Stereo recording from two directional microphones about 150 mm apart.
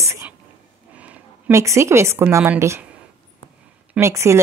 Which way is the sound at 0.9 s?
10° right (ahead or behind).